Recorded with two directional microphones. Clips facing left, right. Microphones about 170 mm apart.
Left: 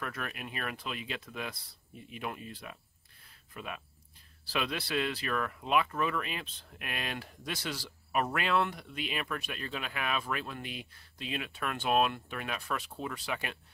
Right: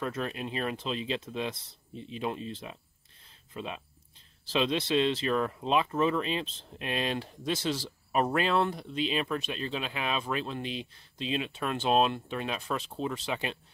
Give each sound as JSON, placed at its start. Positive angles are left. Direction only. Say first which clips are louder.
{"t": 0.0, "sound": "speech", "louder": "right 6 dB", "side_deg": -25}
{"t": 3.3, "sound": "a sound", "louder": "right 4 dB", "side_deg": -25}
{"t": 4.5, "sound": "speech", "louder": "right 7 dB", "side_deg": -25}